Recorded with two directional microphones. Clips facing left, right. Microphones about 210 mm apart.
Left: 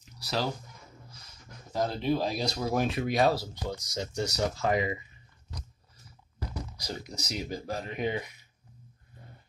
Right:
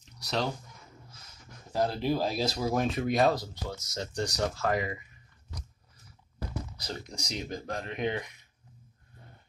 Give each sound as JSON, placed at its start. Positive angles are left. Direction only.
{"t": 0.0, "sound": "music", "side_deg": 0}
{"t": 1.7, "sound": "speech", "side_deg": -5}
{"t": 4.6, "sound": "speech", "side_deg": 20}
{"t": 6.8, "sound": "speech", "side_deg": 10}